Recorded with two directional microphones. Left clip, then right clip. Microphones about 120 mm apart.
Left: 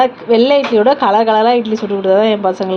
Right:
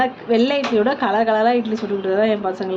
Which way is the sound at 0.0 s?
20° left (ahead or behind).